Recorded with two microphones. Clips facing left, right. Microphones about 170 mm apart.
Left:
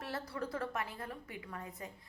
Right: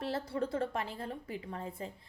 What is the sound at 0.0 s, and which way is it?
A woman's voice, 25° right (ahead or behind).